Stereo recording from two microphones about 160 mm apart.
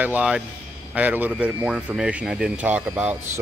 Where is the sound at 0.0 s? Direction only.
10° right (ahead or behind).